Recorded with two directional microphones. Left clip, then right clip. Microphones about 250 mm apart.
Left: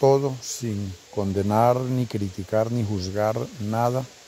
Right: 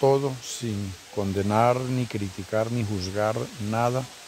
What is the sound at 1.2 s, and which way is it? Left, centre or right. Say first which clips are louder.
Speech: left 2 dB; centre.